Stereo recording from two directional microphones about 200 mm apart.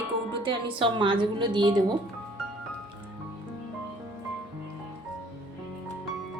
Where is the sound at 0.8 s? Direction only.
25° right (ahead or behind).